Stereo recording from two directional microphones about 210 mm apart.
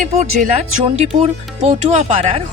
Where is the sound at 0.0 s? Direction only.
30° right (ahead or behind).